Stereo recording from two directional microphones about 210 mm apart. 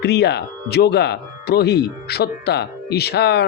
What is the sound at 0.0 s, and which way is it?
Speech, 50° left (ahead or behind).